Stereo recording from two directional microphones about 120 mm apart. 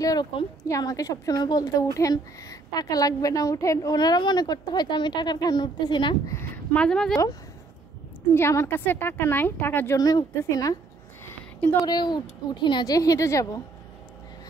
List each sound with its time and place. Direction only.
0.0 s a woman's voice: 30° left (ahead or behind)
6.2 s a woman's voice: 15° left (ahead or behind)
8.4 s a woman's voice: 20° left (ahead or behind)
9.9 s a woman's voice: 30° left (ahead or behind)
11.8 s a woman's voice: 35° left (ahead or behind)